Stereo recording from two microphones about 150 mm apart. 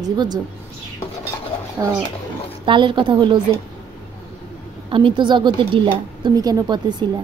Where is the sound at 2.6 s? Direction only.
35° right (ahead or behind).